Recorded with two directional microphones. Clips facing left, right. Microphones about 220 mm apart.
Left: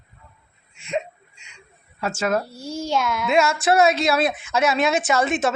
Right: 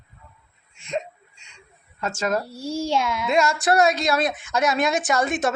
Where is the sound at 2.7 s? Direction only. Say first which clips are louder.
Even; 30° right (ahead or behind).